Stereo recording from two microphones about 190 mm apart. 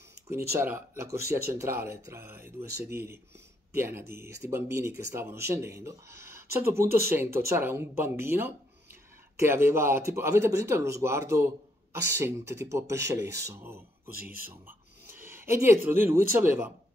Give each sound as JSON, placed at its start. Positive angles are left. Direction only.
{"t": 0.5, "sound": "speech", "side_deg": -15}
{"t": 14.7, "sound": "a sound", "side_deg": -10}
{"t": 16.3, "sound": "speech", "side_deg": -10}